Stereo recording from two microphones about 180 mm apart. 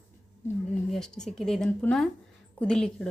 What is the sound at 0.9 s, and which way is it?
A woman's voice, 5° left (ahead or behind).